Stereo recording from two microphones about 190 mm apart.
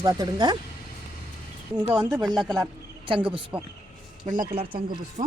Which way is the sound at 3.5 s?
10° right (ahead or behind).